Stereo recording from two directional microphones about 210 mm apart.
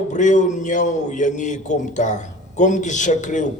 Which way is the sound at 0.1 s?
35° left (ahead or behind).